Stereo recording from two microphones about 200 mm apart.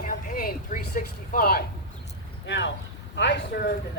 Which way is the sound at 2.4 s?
65° left (ahead or behind).